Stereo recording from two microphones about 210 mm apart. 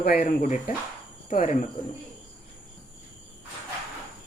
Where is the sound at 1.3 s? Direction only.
35° left (ahead or behind).